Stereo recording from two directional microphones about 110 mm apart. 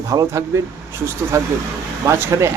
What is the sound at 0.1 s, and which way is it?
Speech, 30° right (ahead or behind).